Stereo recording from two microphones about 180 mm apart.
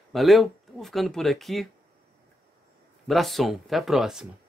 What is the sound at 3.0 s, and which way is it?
Speech, centre (ahead or behind).